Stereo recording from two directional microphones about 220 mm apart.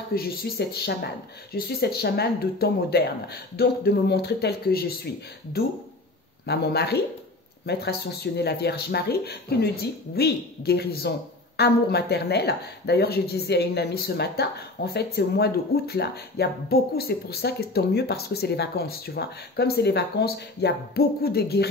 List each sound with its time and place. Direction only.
0.1 s speech: 45° left (ahead or behind)